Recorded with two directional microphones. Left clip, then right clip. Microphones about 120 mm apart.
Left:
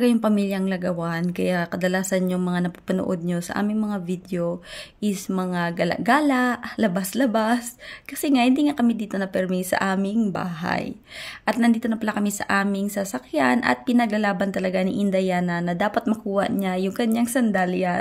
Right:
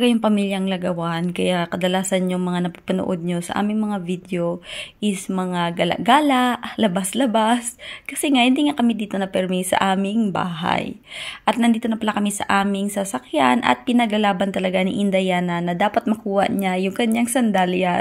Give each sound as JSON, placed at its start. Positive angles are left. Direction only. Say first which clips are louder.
{"t": 0.0, "sound": "speech", "louder": "right 2 dB", "side_deg": -5}
{"t": 9.6, "sound": "speech", "louder": "right 4 dB", "side_deg": -25}
{"t": 11.9, "sound": "speech", "louder": "right 3 dB", "side_deg": -10}